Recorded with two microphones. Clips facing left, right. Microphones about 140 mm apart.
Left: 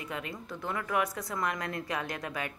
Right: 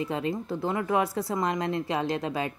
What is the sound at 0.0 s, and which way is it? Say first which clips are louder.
Speech: right 10 dB; 30° right (ahead or behind).